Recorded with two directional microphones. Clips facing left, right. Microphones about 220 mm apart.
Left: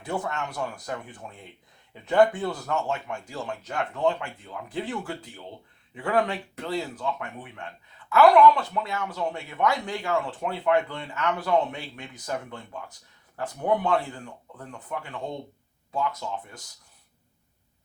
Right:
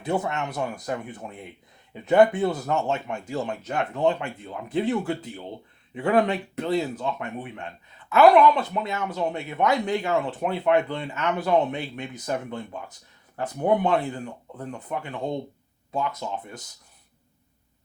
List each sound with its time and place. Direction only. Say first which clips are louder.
0.0 s speech: right 4 dB; 20° right (ahead or behind)